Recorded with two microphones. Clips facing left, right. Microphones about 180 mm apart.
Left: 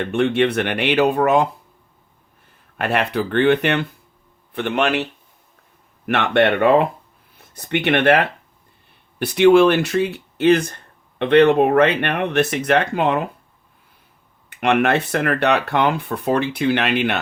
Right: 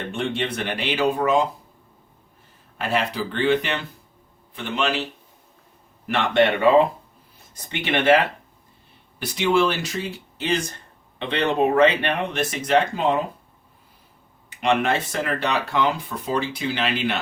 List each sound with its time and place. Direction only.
0.0 s speech: 65° left (ahead or behind)
2.7 s speech: 60° left (ahead or behind)
6.1 s speech: 65° left (ahead or behind)
14.5 s speech: 60° left (ahead or behind)